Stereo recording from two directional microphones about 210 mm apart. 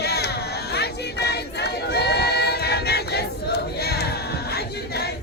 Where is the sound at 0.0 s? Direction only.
50° left (ahead or behind).